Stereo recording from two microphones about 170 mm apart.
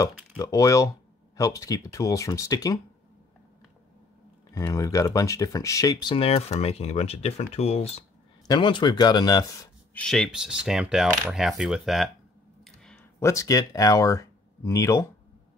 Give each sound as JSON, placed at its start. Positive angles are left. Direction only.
{"t": 0.4, "sound": "speech", "side_deg": 20}
{"t": 4.6, "sound": "speech", "side_deg": 20}
{"t": 9.9, "sound": "coin", "side_deg": 5}
{"t": 12.6, "sound": "a sound", "side_deg": 5}
{"t": 13.2, "sound": "speech", "side_deg": 20}